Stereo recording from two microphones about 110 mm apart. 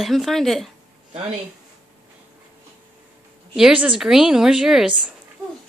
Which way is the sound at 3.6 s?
10° right (ahead or behind).